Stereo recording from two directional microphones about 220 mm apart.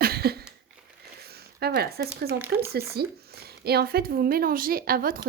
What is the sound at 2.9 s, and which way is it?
Speech, 45° right (ahead or behind).